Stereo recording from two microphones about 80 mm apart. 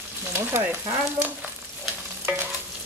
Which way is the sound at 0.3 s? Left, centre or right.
Right.